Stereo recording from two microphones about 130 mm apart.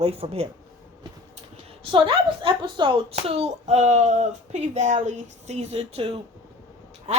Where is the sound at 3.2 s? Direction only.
55° right (ahead or behind).